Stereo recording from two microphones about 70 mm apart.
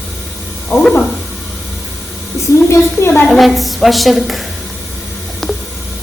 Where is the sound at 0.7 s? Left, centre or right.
Left.